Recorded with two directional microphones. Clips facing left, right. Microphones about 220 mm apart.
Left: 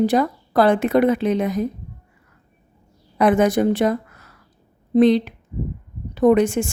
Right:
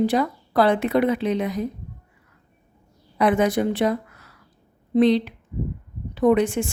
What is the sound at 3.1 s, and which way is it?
A woman's voice, 45° left (ahead or behind).